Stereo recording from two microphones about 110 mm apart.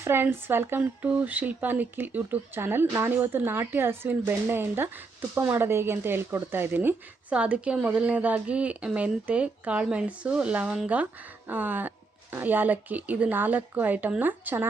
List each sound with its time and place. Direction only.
0.0 s speech: 20° right (ahead or behind)